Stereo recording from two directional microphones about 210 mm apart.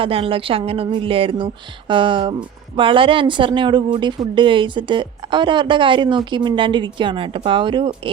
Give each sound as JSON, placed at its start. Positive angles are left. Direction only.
{"t": 0.0, "sound": "speech", "side_deg": -25}